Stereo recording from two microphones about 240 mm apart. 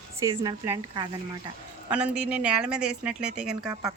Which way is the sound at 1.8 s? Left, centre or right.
Centre.